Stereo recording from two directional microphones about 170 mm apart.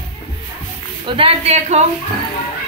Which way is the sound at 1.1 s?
35° right (ahead or behind).